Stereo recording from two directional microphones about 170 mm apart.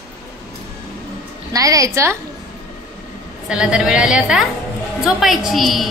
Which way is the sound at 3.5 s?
5° right (ahead or behind).